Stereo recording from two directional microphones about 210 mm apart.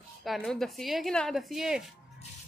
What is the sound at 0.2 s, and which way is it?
A woman's voice, centre (ahead or behind).